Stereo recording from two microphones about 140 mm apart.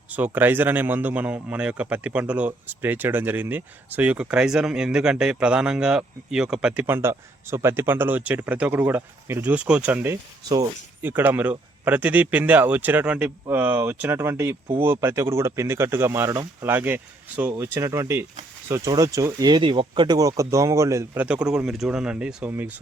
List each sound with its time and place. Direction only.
0.1 s speech: 10° right (ahead or behind)
6.8 s speech: 15° right (ahead or behind)
21.2 s speech: 5° right (ahead or behind)